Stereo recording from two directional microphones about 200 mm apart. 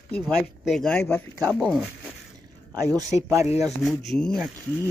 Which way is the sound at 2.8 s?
20° right (ahead or behind).